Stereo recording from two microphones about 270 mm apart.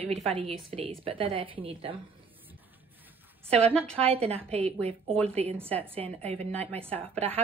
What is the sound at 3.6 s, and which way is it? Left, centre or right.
Speech, centre.